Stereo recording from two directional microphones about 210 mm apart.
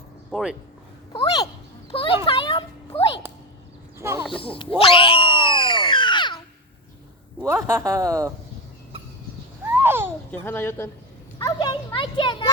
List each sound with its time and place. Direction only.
0.3 s speech: centre (ahead or behind)
1.1 s a sound: 20° left (ahead or behind)
3.9 s a sound: 15° right (ahead or behind)
4.3 s speech: 25° left (ahead or behind)
4.8 s cat: 25° left (ahead or behind)
7.4 s speech: 10° right (ahead or behind)
9.6 s a sound: 10° right (ahead or behind)
10.4 s speech: 10° left (ahead or behind)
11.3 s speech: 20° left (ahead or behind)